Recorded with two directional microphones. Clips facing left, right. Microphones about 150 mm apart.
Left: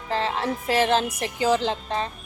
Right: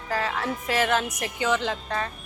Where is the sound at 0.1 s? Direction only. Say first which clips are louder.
Left 2 dB; 25° left (ahead or behind).